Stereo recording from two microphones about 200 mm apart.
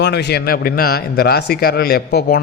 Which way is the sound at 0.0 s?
55° left (ahead or behind).